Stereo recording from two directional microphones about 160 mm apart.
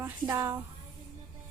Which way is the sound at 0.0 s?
15° right (ahead or behind).